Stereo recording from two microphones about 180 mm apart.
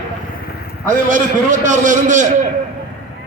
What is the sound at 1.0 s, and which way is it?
A man's voice, 45° right (ahead or behind).